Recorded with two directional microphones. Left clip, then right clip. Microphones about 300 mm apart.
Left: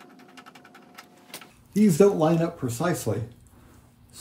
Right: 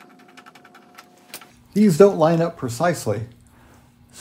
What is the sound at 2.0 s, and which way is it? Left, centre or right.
Speech, right.